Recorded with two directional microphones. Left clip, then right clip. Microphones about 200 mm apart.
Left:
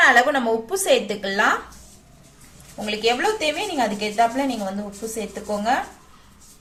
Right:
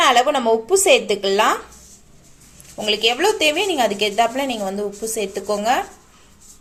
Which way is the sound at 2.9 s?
40° right (ahead or behind).